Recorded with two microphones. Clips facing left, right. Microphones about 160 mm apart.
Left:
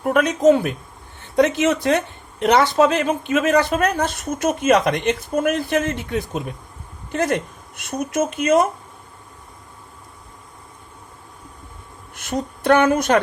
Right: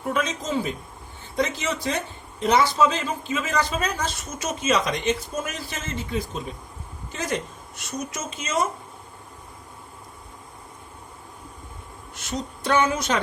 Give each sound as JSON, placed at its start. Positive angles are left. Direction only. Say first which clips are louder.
{"t": 0.0, "sound": "speech", "louder": "left 11 dB", "side_deg": 60}
{"t": 12.1, "sound": "speech", "louder": "left 6 dB", "side_deg": 55}